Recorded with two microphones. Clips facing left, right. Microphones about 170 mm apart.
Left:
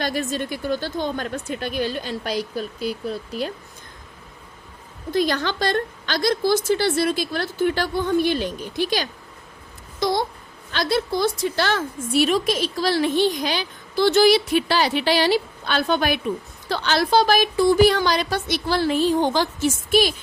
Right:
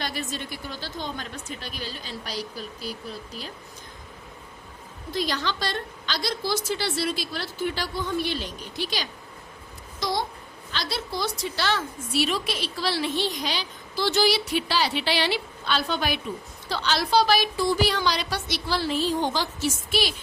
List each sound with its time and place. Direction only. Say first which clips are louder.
0.0 s a woman's voice: left 7 dB; 50° left (ahead or behind)
5.1 s a woman's voice: left 6 dB; 50° left (ahead or behind)
10.0 s babbling: left 6 dB; 55° left (ahead or behind)
10.7 s a woman's voice: left 9 dB; 55° left (ahead or behind)